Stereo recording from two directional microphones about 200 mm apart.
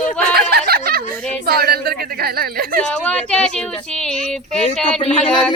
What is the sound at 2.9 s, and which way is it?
Speech, 5° left (ahead or behind).